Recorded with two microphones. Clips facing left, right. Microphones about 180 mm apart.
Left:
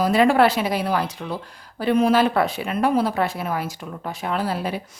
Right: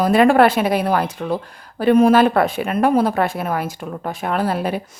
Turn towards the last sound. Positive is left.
turn(degrees=-55)  # may be behind; listen again after turning